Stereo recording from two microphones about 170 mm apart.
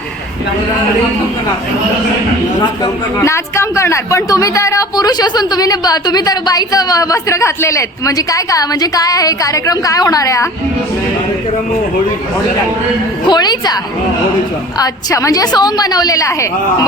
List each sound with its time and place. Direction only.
2.8 s a man's voice: 15° left (ahead or behind)
13.2 s a man's voice: 25° left (ahead or behind)
14.8 s a man's voice: 20° left (ahead or behind)